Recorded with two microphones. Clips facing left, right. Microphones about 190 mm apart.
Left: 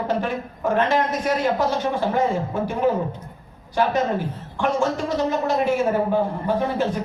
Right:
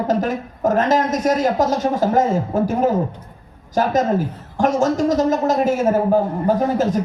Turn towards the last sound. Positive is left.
turn(degrees=-40)  # may be behind; listen again after turning